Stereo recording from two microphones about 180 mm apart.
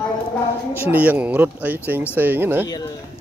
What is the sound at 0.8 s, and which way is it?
Speech, 10° right (ahead or behind).